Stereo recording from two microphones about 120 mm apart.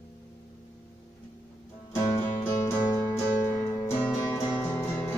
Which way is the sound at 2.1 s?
20° left (ahead or behind).